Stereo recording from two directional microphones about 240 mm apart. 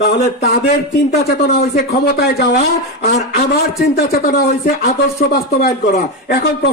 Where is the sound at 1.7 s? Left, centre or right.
Left.